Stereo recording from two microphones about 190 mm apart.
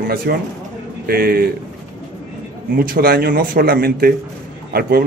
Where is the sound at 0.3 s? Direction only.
55° right (ahead or behind).